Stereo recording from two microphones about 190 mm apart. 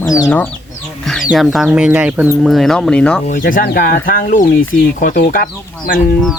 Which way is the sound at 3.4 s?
50° left (ahead or behind).